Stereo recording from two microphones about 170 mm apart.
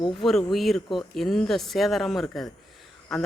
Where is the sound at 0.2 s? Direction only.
Centre (ahead or behind).